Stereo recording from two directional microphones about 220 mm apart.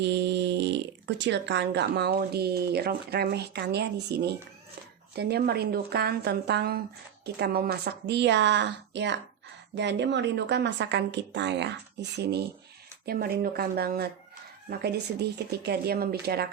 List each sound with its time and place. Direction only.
0.0 s speech: 50° right (ahead or behind)